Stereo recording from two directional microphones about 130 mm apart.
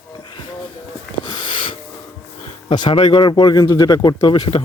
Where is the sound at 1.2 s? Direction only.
35° left (ahead or behind).